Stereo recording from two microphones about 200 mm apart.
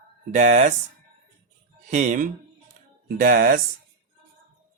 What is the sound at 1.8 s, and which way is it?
Speech, 40° right (ahead or behind).